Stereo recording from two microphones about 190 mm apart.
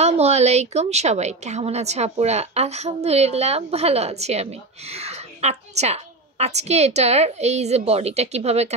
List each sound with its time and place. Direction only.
0.0 s a woman's voice: 35° right (ahead or behind)